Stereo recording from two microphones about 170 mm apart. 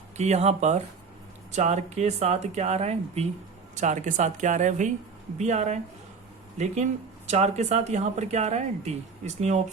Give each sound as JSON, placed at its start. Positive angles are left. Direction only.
{"t": 0.2, "sound": "a woman's voice", "side_deg": -40}
{"t": 7.3, "sound": "a woman's voice", "side_deg": -40}